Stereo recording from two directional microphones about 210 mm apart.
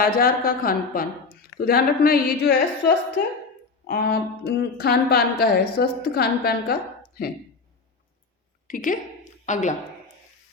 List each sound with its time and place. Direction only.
0.0 s a woman's voice: 45° left (ahead or behind)
3.8 s a woman's voice: 50° left (ahead or behind)
8.6 s a woman's voice: 40° left (ahead or behind)